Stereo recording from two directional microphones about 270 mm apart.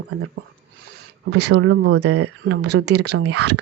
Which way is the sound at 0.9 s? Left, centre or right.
Right.